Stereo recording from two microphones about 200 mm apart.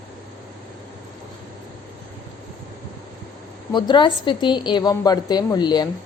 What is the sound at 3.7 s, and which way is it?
A woman's voice, 25° left (ahead or behind).